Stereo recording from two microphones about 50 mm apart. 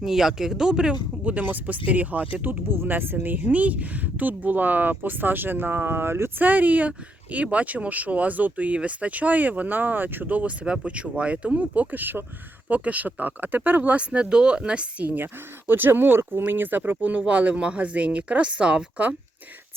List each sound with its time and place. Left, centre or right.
0.0 s speech: centre
1.2 s speech: right
2.6 s speech: right
6.4 s speech: right
15.0 s speech: right